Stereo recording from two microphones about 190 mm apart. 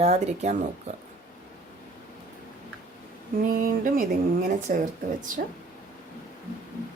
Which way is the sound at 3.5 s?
45° right (ahead or behind).